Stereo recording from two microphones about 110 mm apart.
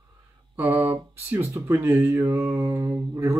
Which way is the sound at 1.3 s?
25° right (ahead or behind).